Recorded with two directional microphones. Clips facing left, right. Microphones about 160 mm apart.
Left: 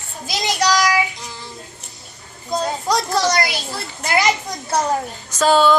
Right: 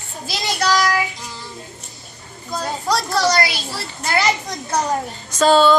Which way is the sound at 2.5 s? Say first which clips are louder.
Left 2 dB; 20° left (ahead or behind).